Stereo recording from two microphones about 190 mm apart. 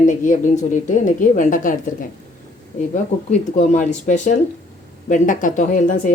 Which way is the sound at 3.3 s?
35° left (ahead or behind).